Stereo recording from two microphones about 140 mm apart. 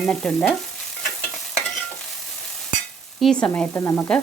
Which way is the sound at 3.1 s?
5° left (ahead or behind).